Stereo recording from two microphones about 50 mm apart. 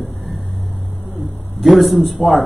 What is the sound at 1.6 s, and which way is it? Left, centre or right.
Speech, centre.